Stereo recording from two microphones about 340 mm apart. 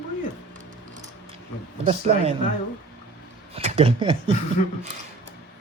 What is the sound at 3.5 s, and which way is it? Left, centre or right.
Speech, centre.